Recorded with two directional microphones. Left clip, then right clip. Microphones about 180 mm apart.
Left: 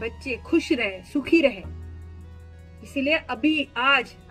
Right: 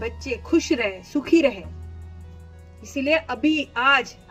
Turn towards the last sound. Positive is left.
turn(degrees=15)  # may be behind; listen again after turning